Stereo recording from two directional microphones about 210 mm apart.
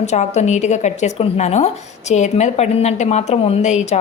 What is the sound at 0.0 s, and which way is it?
A woman's voice, 30° left (ahead or behind).